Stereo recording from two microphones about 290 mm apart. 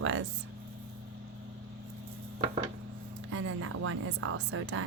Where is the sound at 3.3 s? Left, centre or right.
Right.